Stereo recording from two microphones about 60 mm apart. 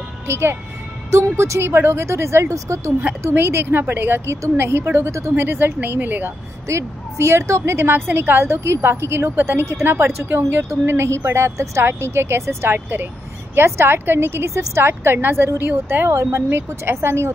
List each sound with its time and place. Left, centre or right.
0.3 s a woman's voice: right
3.2 s a woman's voice: right
5.3 s speech: right
6.7 s a woman's voice: right
9.3 s a woman's voice: right
11.8 s a woman's voice: right
16.4 s a woman's voice: right